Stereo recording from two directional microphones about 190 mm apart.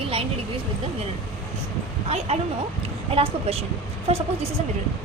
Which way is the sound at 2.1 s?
35° right (ahead or behind).